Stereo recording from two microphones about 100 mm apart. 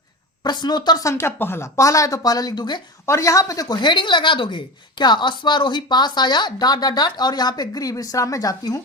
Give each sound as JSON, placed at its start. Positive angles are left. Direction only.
{"t": 0.4, "sound": "a woman's voice", "side_deg": 45}
{"t": 1.0, "sound": "speech", "side_deg": 25}
{"t": 3.1, "sound": "a woman's voice", "side_deg": 30}